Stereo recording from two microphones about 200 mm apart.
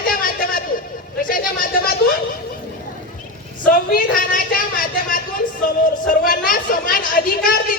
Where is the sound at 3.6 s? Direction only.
45° left (ahead or behind).